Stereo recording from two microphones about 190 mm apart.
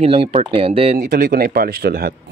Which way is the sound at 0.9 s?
50° right (ahead or behind).